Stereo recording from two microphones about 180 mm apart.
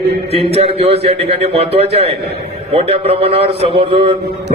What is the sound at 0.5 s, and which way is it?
A man's voice, 35° right (ahead or behind).